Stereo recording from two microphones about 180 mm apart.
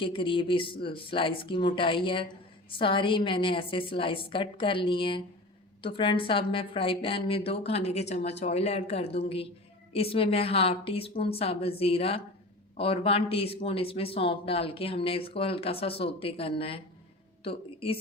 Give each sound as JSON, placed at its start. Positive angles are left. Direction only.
{"t": 0.0, "sound": "a woman's voice", "side_deg": 30}